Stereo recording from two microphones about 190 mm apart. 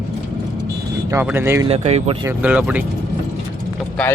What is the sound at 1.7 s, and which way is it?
Speech, 35° right (ahead or behind).